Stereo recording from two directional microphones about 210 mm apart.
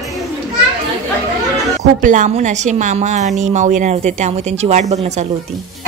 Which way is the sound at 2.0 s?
35° right (ahead or behind).